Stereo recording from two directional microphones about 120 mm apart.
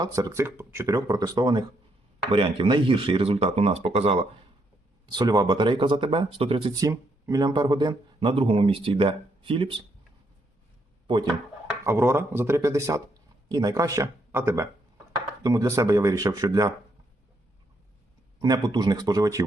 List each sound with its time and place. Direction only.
0.0 s speech: 30° right (ahead or behind); by 4.3 s 55° right (ahead or behind)
5.0 s speech: 35° right (ahead or behind); by 6.7 s 50° right (ahead or behind)
6.7 s speech: 30° right (ahead or behind); by 9.8 s 45° right (ahead or behind)
11.0 s a sound: 45° right (ahead or behind)
11.9 s speech: 20° right (ahead or behind)
18.3 s speech: 35° right (ahead or behind)